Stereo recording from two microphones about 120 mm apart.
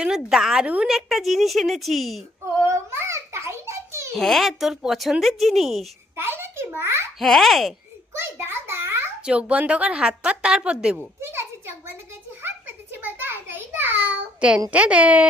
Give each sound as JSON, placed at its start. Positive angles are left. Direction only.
{"t": 0.0, "sound": "a woman's voice", "side_deg": -5}
{"t": 2.6, "sound": "a sound", "side_deg": -20}
{"t": 4.1, "sound": "a woman's voice", "side_deg": 5}
{"t": 6.1, "sound": "a child's voice", "side_deg": -20}
{"t": 7.2, "sound": "a woman's voice", "side_deg": 0}
{"t": 8.2, "sound": "a child's voice", "side_deg": -20}
{"t": 9.2, "sound": "a woman's voice", "side_deg": -10}
{"t": 11.2, "sound": "a sound", "side_deg": -20}
{"t": 14.7, "sound": "a woman's voice", "side_deg": -10}